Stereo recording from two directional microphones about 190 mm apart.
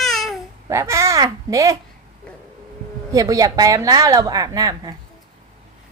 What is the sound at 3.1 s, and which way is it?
A woman's voice, 15° right (ahead or behind).